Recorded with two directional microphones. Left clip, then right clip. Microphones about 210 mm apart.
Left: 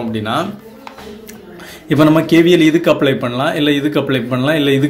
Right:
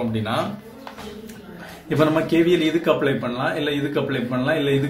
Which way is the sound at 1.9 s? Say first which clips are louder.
Left 8 dB; 40° left (ahead or behind).